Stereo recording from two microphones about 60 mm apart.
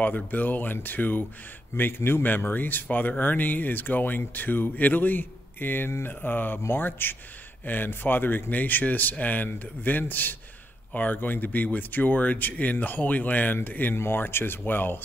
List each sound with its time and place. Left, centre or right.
0.0 s speech: left